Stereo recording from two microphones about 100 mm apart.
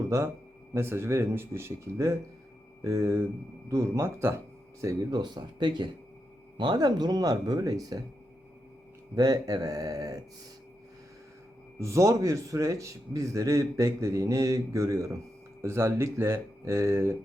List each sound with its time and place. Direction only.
0.7 s speech: 25° right (ahead or behind)
5.2 s speech: 45° right (ahead or behind)
9.1 s speech: 40° right (ahead or behind)
11.8 s speech: 30° right (ahead or behind)